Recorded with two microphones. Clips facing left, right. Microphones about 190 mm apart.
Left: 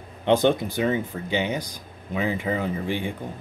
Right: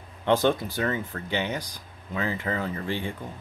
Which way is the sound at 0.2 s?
20° left (ahead or behind).